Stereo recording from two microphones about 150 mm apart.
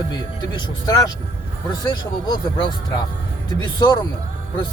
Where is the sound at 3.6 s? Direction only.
30° left (ahead or behind).